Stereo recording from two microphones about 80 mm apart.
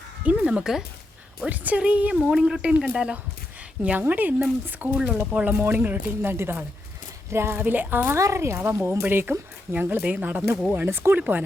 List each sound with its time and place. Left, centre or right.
0.3 s speech: centre
1.5 s speech: centre
7.5 s speech: right
8.2 s speech: right
8.5 s speech: right
11.2 s speech: right